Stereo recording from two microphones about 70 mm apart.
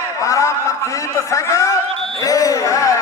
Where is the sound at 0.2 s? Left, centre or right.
Left.